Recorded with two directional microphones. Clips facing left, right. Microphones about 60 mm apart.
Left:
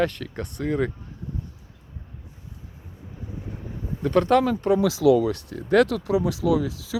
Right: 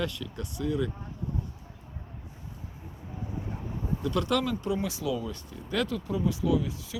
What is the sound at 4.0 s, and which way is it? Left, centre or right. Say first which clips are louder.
Speech: left 9 dB; left.